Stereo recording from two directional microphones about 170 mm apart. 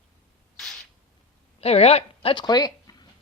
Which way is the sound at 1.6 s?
35° left (ahead or behind).